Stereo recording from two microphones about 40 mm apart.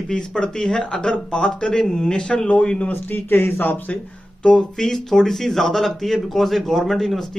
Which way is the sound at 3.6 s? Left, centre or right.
Left.